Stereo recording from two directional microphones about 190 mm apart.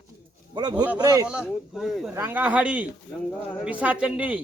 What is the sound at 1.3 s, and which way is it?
A man's voice, centre (ahead or behind).